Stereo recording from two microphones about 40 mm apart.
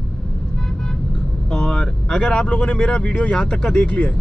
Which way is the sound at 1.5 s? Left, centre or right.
Left.